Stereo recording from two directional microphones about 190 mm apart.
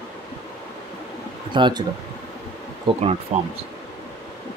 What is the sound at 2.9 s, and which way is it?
Speech, 35° right (ahead or behind).